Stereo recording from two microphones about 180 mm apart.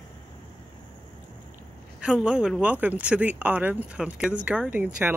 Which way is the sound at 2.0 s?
5° right (ahead or behind).